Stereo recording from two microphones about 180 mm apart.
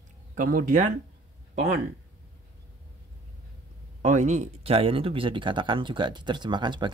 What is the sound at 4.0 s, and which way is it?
Speech, 45° right (ahead or behind).